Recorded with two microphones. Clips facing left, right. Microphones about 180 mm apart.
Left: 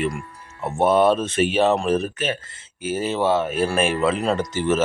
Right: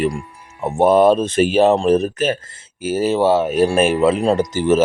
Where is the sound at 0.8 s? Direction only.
35° right (ahead or behind).